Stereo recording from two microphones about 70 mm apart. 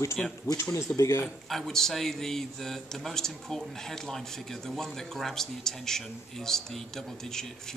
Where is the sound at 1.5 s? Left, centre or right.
Centre.